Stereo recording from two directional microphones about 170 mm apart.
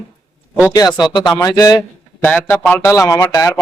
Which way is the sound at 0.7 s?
25° left (ahead or behind).